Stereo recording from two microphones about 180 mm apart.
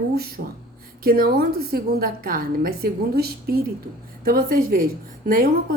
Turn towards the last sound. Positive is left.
turn(degrees=-55)  # may be behind; listen again after turning